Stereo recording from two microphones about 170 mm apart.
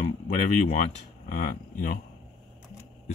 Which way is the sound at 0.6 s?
45° left (ahead or behind).